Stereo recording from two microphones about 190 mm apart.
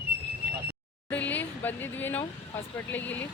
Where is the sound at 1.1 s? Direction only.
10° left (ahead or behind).